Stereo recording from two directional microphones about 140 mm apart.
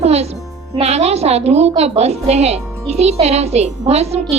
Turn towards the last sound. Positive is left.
turn(degrees=-50)  # may be behind; listen again after turning